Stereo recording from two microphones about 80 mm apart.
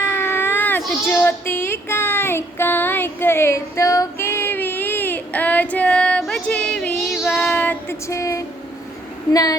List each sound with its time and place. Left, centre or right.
0.0 s baby cry: left
1.1 s child singing: left
4.2 s child singing: left; by 6.2 s centre
6.5 s female singing: centre
7.4 s child singing: left
8.0 s speech: left
9.3 s a woman's voice: left